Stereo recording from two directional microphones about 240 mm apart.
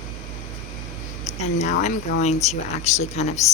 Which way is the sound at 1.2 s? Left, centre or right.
Left.